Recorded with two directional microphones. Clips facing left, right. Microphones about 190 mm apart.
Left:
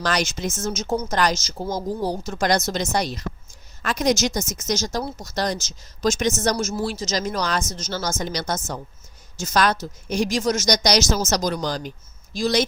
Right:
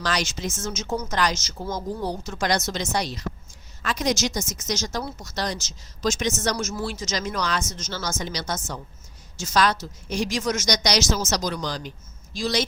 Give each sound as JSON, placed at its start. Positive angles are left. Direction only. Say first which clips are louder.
{"t": 0.0, "sound": "a woman's voice", "louder": "left 3 dB", "side_deg": 50}
{"t": 1.1, "sound": "a woman's voice", "louder": "left 2 dB", "side_deg": 45}
{"t": 1.5, "sound": "a woman's voice", "louder": "left 3 dB", "side_deg": 30}
{"t": 4.6, "sound": "a woman's voice", "louder": "left 4 dB", "side_deg": 40}
{"t": 7.1, "sound": "a woman's voice", "louder": "left 1 dB", "side_deg": 40}